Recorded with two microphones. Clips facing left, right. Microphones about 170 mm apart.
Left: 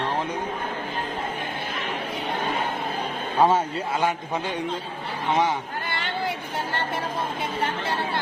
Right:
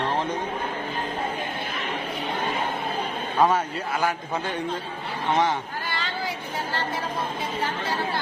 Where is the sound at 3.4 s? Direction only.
25° left (ahead or behind).